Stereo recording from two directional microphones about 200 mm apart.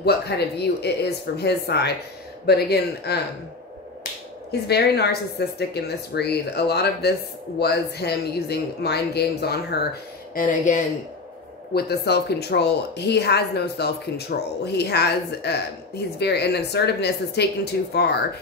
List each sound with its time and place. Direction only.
0.6 s speech: 55° left (ahead or behind)
4.5 s speech: 55° left (ahead or behind)
10.3 s speech: 40° left (ahead or behind)
11.7 s speech: 55° left (ahead or behind)